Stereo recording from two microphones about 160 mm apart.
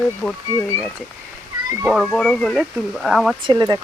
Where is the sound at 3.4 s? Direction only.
25° right (ahead or behind).